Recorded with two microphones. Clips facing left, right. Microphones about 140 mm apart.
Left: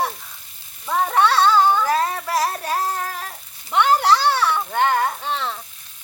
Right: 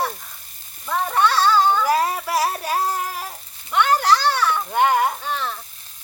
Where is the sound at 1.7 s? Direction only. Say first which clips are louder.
Right 1 dB; 10° right (ahead or behind).